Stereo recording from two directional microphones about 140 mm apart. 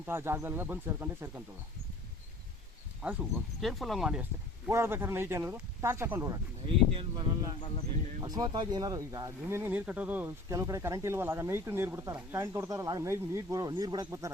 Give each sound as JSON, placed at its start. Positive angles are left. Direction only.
{"t": 0.0, "sound": "speech", "side_deg": -15}
{"t": 3.0, "sound": "speech", "side_deg": -10}
{"t": 3.6, "sound": "speech", "side_deg": 0}
{"t": 4.7, "sound": "speech", "side_deg": -15}
{"t": 6.7, "sound": "speech", "side_deg": -40}
{"t": 8.2, "sound": "speech", "side_deg": -30}